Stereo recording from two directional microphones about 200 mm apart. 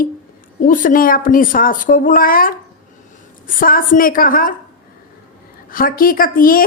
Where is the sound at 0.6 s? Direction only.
40° left (ahead or behind).